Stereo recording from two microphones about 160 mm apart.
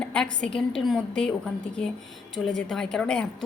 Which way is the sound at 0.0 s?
5° left (ahead or behind).